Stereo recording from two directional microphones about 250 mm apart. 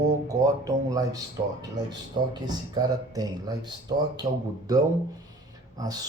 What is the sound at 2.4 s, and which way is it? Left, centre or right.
A man's voice, centre.